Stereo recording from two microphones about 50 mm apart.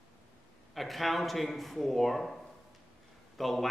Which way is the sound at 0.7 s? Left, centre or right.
Centre.